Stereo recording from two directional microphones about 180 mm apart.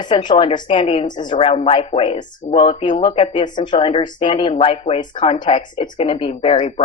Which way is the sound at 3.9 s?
35° left (ahead or behind).